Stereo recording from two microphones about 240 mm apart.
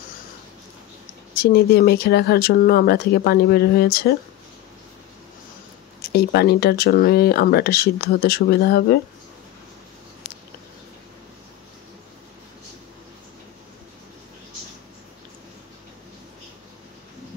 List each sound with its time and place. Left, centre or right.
1.4 s speech: left
6.1 s speech: left